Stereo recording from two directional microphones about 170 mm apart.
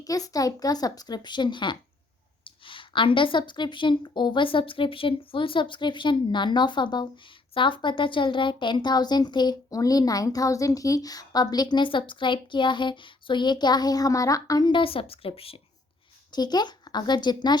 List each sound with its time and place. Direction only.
0.0 s speech: 20° left (ahead or behind)